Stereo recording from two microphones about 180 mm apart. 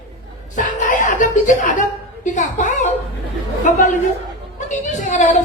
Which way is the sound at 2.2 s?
45° left (ahead or behind).